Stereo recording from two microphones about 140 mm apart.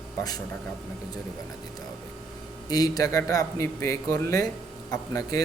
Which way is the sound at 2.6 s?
25° left (ahead or behind).